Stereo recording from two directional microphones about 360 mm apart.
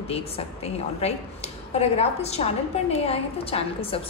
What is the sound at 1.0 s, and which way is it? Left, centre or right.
A woman's voice, centre.